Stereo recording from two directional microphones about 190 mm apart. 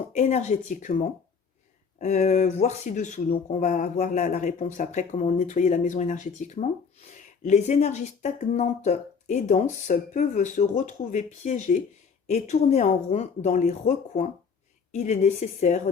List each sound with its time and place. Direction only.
0.2 s speech: 35° left (ahead or behind)
2.0 s speech: 35° left (ahead or behind)